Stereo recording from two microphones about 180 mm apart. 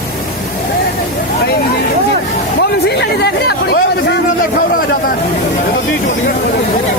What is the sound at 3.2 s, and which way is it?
Chatter, 65° left (ahead or behind).